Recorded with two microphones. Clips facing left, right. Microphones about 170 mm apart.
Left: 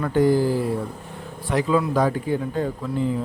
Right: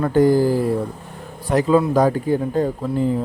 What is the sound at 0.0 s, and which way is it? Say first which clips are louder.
Speech: right 4 dB; 45° right (ahead or behind).